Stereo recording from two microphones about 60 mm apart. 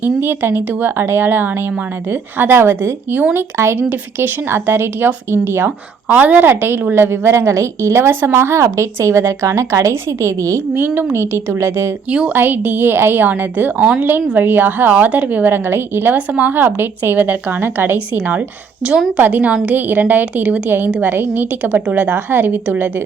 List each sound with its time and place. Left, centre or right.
0.0 s speech: right
6.5 s speech: right
10.8 s speech: right
12.3 s speech: right
13.7 s a woman's voice: centre
14.0 s speech: right
16.1 s a woman's voice: right
21.8 s a woman's voice: right
22.1 s speech: right